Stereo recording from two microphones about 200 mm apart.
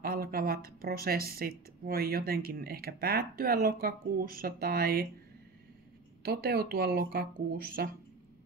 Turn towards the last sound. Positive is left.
turn(degrees=-50)  # may be behind; listen again after turning